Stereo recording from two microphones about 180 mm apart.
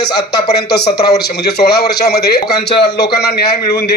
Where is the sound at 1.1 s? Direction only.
65° left (ahead or behind).